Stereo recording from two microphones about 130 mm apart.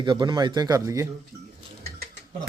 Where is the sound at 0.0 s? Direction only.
35° right (ahead or behind).